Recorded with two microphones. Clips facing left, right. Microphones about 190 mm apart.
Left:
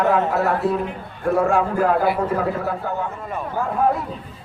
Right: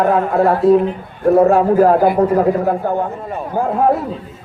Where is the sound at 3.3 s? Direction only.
35° right (ahead or behind).